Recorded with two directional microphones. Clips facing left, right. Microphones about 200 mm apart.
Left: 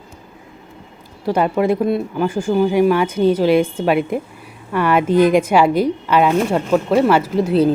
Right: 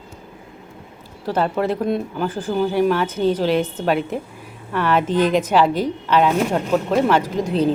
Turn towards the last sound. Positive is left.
turn(degrees=5)  # may be behind; listen again after turning